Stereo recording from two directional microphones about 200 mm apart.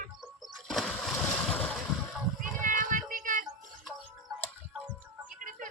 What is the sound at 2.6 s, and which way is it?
Child singing, 40° right (ahead or behind).